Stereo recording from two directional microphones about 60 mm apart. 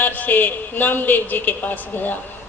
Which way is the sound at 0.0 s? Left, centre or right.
Left.